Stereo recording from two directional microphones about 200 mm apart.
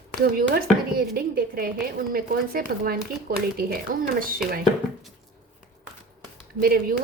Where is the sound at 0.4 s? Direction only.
50° right (ahead or behind).